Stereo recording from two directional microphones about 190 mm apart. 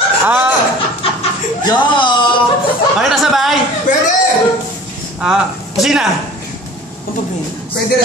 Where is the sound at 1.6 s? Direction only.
25° left (ahead or behind).